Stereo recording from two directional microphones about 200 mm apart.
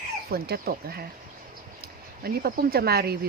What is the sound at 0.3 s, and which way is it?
Speech, 50° right (ahead or behind).